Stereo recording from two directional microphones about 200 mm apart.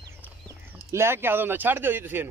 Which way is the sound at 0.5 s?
10° right (ahead or behind).